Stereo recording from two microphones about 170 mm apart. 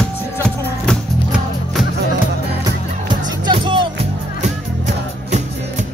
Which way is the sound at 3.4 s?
30° right (ahead or behind).